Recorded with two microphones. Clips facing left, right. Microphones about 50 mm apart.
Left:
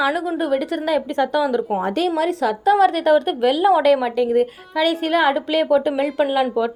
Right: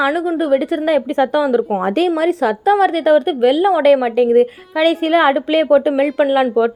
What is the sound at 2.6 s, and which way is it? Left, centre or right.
A woman's voice, centre.